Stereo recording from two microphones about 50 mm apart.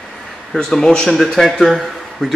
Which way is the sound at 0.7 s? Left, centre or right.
Centre.